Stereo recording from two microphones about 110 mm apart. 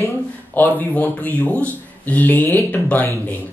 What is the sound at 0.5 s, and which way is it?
Speech, 15° left (ahead or behind).